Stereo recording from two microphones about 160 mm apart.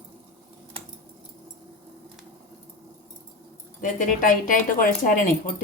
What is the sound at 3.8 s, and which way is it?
Speech, 55° left (ahead or behind).